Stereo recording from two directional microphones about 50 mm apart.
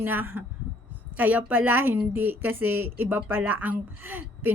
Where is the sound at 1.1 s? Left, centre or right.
Right.